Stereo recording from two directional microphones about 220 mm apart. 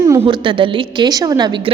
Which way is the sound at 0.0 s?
15° right (ahead or behind).